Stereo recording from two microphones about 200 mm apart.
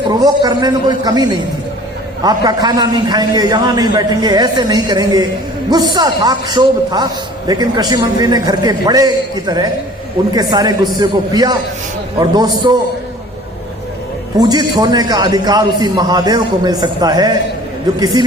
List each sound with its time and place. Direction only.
0.1 s a man's voice: 20° right (ahead or behind)
14.3 s a man's voice: 20° right (ahead or behind)